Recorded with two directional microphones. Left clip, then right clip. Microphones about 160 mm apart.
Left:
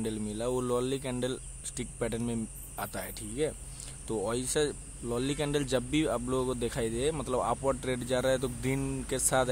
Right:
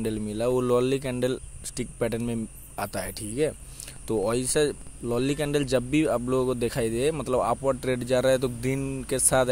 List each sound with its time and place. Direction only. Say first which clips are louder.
0.0 s speech: right 7 dB; 30° right (ahead or behind)